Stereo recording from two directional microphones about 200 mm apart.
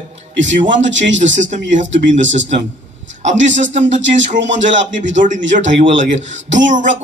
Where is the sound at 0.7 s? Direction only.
65° right (ahead or behind).